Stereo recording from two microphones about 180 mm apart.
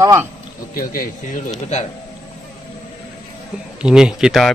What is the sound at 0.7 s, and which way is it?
Speech, 50° left (ahead or behind).